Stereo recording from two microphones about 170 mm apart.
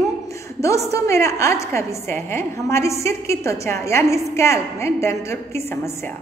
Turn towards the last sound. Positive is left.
turn(degrees=15)  # may be behind; listen again after turning